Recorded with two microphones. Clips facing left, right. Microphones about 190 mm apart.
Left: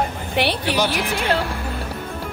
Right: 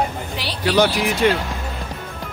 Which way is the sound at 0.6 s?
65° right (ahead or behind).